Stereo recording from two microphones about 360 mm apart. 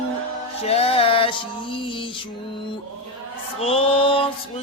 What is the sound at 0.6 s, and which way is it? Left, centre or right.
Music, centre.